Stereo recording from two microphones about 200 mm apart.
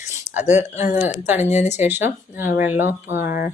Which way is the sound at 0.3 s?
10° right (ahead or behind).